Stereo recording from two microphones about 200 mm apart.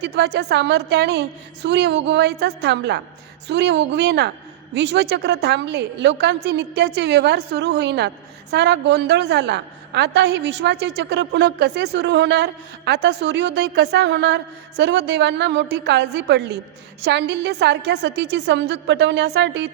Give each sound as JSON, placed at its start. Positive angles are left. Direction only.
{"t": 0.0, "sound": "a woman's voice", "side_deg": -55}